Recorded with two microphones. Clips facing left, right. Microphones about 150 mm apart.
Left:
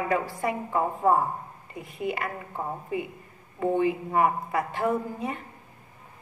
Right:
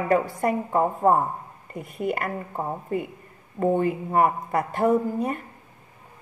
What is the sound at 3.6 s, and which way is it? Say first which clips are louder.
A woman's voice: right 2 dB; 45° right (ahead or behind).